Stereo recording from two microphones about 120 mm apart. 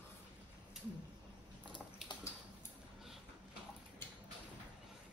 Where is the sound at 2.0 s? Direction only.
5° right (ahead or behind).